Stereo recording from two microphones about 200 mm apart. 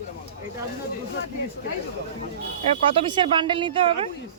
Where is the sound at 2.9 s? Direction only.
25° right (ahead or behind).